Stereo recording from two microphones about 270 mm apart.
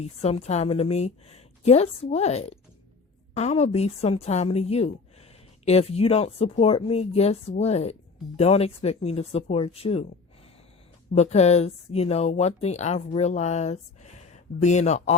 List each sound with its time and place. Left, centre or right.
0.0 s speech: left
11.1 s speech: left